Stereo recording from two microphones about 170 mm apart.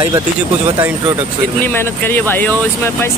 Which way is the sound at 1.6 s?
10° left (ahead or behind).